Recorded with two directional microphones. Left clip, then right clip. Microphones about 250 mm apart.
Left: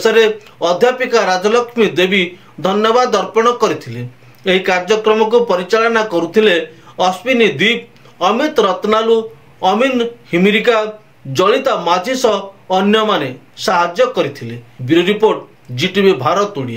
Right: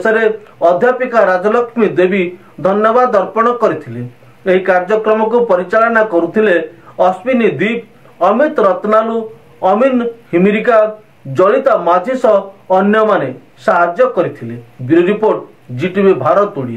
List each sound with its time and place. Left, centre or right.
0.0 s a man's voice: left